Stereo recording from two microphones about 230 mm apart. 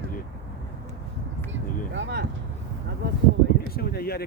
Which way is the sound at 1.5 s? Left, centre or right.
Right.